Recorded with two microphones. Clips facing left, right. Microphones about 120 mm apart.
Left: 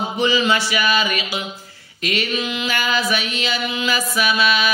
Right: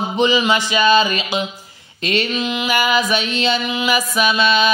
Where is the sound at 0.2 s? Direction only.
15° right (ahead or behind).